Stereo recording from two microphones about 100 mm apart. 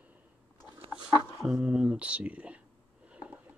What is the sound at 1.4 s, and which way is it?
Speech, 5° right (ahead or behind).